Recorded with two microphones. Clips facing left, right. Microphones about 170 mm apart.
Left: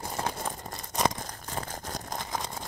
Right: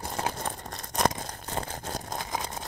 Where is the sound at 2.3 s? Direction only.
5° right (ahead or behind).